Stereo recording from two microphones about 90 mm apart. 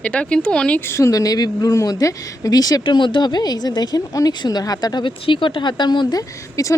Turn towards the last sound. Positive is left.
turn(degrees=40)  # may be behind; listen again after turning